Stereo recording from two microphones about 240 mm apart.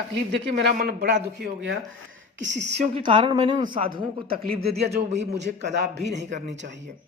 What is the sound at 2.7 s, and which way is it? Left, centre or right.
A woman's voice, right.